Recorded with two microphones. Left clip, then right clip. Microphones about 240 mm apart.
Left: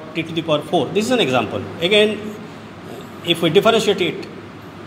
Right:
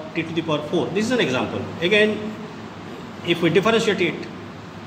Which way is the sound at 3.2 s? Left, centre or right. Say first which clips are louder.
Left 4 dB; left.